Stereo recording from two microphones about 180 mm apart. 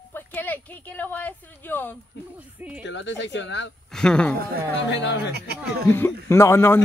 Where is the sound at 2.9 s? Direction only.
85° left.